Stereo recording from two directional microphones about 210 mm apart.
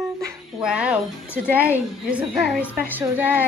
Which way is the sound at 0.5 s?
5° right (ahead or behind).